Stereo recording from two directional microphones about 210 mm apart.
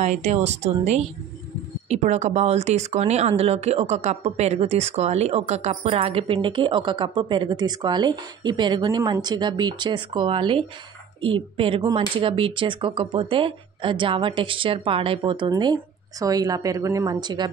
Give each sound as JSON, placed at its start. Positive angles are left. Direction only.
{"t": 0.0, "sound": "speech", "side_deg": -35}